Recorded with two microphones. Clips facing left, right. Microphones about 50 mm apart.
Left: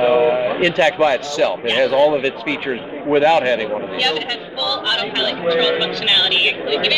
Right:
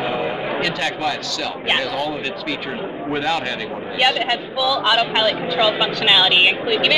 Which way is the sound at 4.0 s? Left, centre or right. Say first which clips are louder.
Right 6 dB; right.